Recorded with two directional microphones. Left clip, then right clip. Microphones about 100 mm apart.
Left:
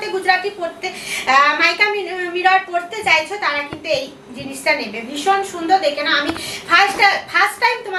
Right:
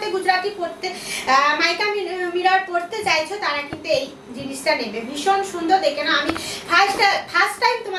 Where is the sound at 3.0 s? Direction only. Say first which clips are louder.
Left 6 dB; 15° right (ahead or behind).